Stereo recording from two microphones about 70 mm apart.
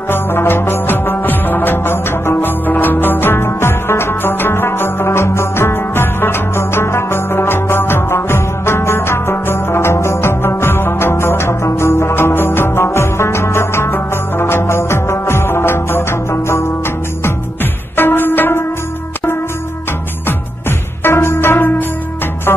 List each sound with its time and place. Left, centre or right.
0.1 s music: left
17.9 s music: left
21.0 s music: left